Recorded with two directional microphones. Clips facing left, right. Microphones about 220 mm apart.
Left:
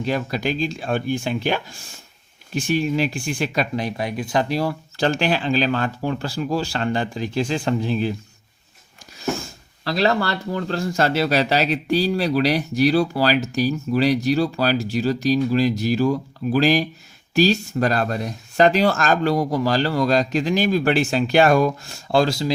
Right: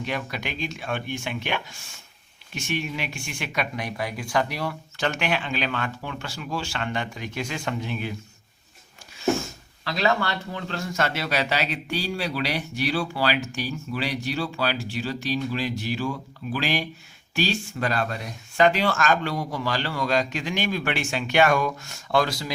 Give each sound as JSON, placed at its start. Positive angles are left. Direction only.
{"t": 0.0, "sound": "speech", "side_deg": 35}
{"t": 9.8, "sound": "speech", "side_deg": 35}